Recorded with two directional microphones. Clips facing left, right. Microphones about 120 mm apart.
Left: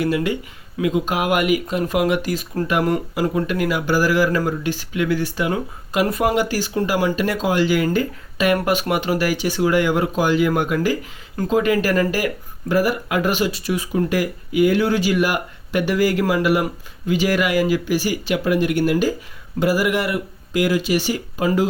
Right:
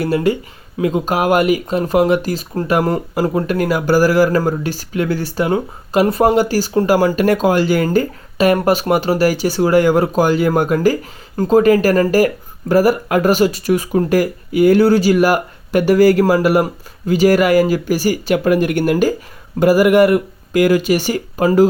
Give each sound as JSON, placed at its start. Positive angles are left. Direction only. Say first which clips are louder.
{"t": 0.0, "sound": "speech", "louder": "right 4 dB", "side_deg": -35}